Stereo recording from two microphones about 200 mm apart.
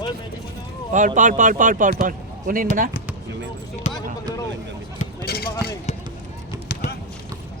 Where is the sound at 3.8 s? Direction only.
35° left (ahead or behind).